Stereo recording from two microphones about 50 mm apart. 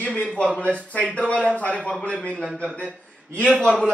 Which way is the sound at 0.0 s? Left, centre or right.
Left.